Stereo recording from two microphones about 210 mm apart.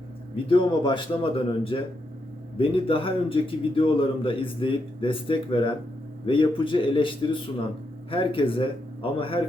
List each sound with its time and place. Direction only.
0.4 s a man's voice: 25° left (ahead or behind)